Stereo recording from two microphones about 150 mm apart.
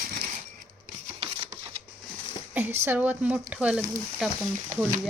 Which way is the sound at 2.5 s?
15° right (ahead or behind).